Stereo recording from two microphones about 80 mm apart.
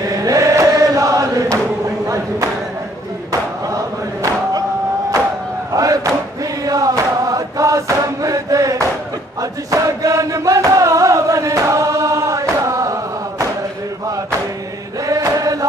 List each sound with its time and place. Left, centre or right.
0.1 s chant: right
2.0 s a sound: right
3.3 s chant: right
5.7 s a sound: right
6.6 s chant: right
15.0 s chant: right